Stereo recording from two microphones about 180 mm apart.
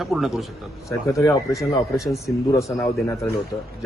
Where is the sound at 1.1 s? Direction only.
15° left (ahead or behind).